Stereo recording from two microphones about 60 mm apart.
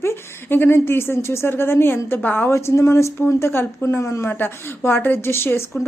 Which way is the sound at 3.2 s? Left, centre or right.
Left.